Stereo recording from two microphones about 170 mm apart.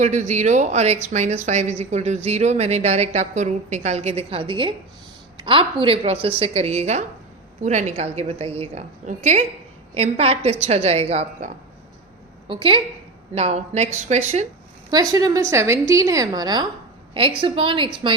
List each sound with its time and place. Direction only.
0.0 s speech: 45° right (ahead or behind)
12.5 s a woman's voice: 30° right (ahead or behind)
15.1 s a woman's voice: 20° right (ahead or behind)